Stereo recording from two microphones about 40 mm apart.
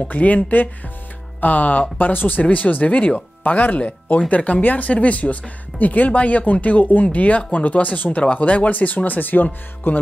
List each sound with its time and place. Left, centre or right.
0.0 s speech: left